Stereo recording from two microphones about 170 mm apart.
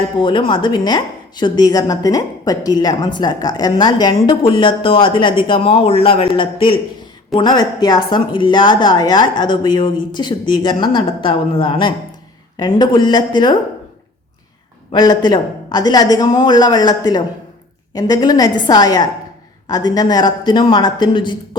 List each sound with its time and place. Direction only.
0.2 s a woman's voice: 30° left (ahead or behind)
14.9 s a woman's voice: 25° left (ahead or behind)